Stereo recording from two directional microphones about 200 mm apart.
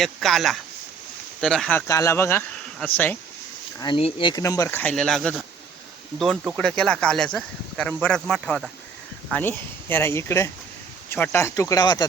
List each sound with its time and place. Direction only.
0.0 s speech: centre (ahead or behind)
3.8 s speech: 25° left (ahead or behind)